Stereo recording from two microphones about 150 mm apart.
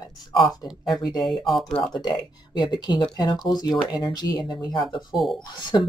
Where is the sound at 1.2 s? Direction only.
Centre (ahead or behind).